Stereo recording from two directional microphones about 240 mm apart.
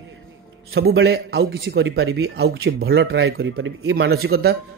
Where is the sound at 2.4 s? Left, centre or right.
Right.